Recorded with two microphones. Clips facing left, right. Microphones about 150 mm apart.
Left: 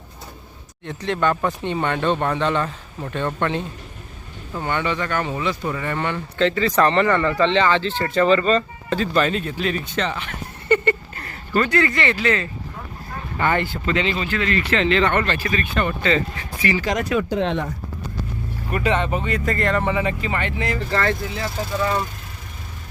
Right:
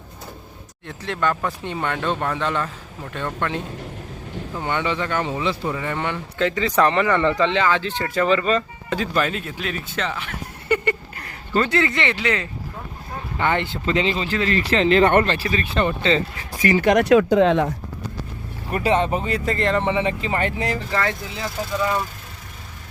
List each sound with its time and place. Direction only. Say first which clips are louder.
0.9 s speech: left 3 dB; 5° right (ahead or behind)
4.6 s speech: left 1 dB; 15° right (ahead or behind); by 15.3 s 45° right (ahead or behind)
15.3 s speech: even; 30° right (ahead or behind)
16.6 s speech: right 5 dB; 45° right (ahead or behind); by 17.7 s 85° right
18.7 s speech: right 2 dB; 35° right (ahead or behind)
20.9 s speech: left 2 dB; 15° right (ahead or behind)